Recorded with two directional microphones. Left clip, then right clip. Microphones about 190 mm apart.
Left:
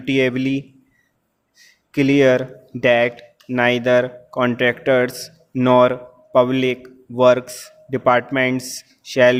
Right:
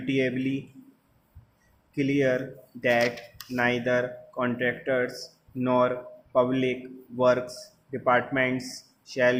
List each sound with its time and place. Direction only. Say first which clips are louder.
0.0 s speech: left 8 dB; 55° left (ahead or behind)
1.9 s speech: left 10 dB; 55° left (ahead or behind)